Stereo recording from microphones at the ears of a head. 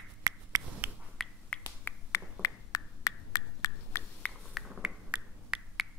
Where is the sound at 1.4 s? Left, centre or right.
Left.